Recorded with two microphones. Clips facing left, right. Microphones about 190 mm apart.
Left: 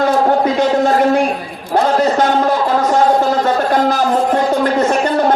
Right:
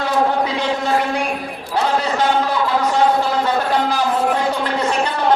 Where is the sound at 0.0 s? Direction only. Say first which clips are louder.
Left 5 dB; 45° left (ahead or behind).